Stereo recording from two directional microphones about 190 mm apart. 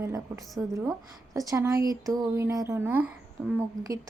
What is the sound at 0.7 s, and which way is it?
A woman's voice, 15° right (ahead or behind).